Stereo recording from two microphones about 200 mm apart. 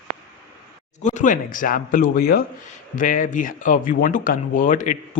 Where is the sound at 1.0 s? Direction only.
40° left (ahead or behind).